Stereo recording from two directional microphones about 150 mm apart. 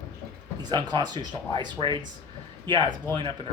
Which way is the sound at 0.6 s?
30° right (ahead or behind).